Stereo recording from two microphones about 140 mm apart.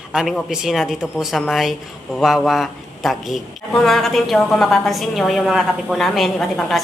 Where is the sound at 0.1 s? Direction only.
5° right (ahead or behind).